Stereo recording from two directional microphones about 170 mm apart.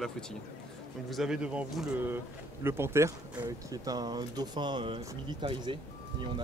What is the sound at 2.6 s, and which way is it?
Speech, 15° right (ahead or behind).